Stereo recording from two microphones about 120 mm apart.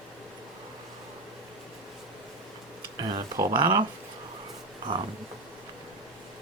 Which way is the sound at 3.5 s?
40° right (ahead or behind).